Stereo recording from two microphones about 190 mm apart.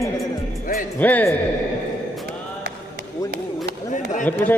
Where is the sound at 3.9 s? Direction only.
40° left (ahead or behind).